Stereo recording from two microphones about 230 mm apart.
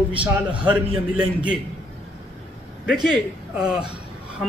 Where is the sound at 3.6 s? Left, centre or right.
Centre.